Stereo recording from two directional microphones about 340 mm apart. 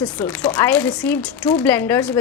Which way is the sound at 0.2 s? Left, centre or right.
Centre.